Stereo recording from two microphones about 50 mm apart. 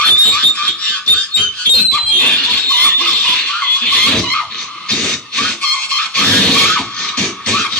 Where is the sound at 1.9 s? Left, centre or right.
Left.